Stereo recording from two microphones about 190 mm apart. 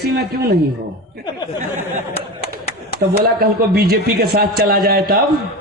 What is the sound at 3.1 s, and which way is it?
A man's voice, 55° right (ahead or behind).